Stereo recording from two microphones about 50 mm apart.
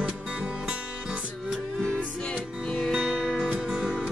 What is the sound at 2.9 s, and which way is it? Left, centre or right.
Music, centre.